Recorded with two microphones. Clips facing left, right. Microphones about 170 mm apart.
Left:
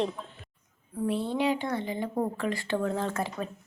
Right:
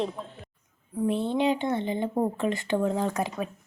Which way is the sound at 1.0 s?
20° right (ahead or behind).